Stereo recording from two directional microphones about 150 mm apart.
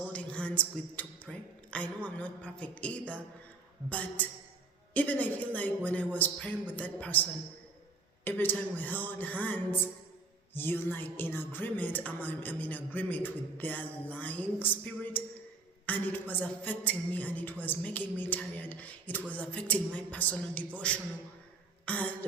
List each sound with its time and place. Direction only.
0.1 s a sound: 10° left (ahead or behind)
3.8 s music: 10° left (ahead or behind)
21.8 s cough: 10° left (ahead or behind)